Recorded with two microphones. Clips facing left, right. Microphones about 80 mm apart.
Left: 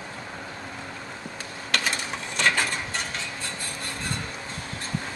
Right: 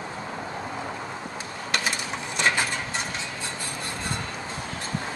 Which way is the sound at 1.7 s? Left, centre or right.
Centre.